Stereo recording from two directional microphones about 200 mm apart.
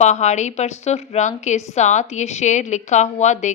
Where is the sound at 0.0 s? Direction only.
35° left (ahead or behind).